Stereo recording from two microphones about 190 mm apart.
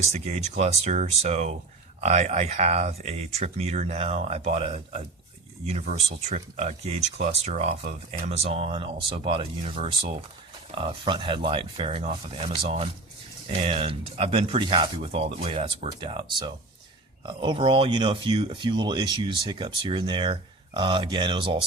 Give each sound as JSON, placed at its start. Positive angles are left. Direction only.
{"t": 0.0, "sound": "speech", "side_deg": -35}